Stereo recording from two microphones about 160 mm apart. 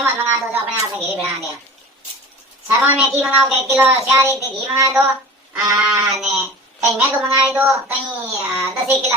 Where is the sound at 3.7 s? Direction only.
15° right (ahead or behind).